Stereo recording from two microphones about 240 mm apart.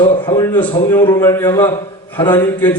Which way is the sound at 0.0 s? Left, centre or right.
Centre.